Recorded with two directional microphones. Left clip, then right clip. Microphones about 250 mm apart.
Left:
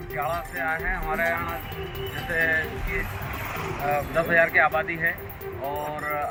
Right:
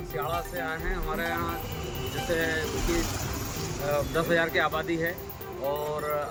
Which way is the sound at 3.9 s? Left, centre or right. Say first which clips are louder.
Left 3 dB; centre.